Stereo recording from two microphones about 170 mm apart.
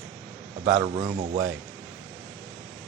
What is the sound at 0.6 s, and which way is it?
Speech, 40° right (ahead or behind).